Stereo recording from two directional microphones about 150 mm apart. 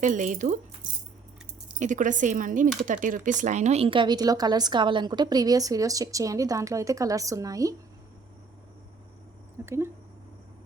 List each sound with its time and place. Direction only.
0.0 s speech: 55° right (ahead or behind)
1.6 s speech: 55° right (ahead or behind); by 7.8 s 25° right (ahead or behind)
9.6 s speech: 15° right (ahead or behind)